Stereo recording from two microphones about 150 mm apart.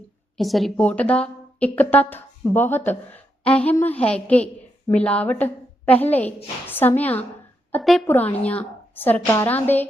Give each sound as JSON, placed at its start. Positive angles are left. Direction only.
{"t": 0.3, "sound": "a woman's voice", "side_deg": 0}
{"t": 8.0, "sound": "a woman's voice", "side_deg": 10}